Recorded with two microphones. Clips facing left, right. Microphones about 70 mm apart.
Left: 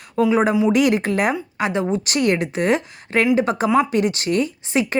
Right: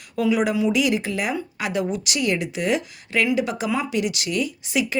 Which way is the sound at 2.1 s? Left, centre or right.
Left.